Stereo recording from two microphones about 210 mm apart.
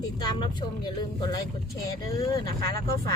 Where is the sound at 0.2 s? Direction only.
20° left (ahead or behind).